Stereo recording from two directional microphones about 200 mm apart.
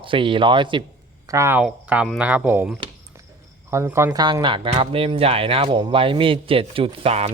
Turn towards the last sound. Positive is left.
turn(degrees=-30)  # may be behind; listen again after turning